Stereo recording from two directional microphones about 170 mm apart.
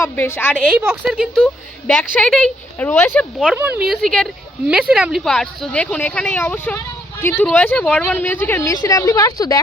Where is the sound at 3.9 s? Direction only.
Centre (ahead or behind).